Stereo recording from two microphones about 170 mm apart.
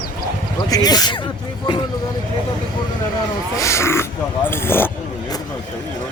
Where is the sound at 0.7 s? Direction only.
20° left (ahead or behind).